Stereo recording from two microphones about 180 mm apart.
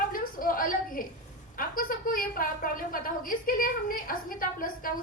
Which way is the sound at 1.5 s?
50° left (ahead or behind).